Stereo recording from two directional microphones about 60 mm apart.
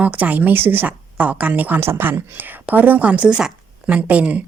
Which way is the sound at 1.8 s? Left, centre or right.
Right.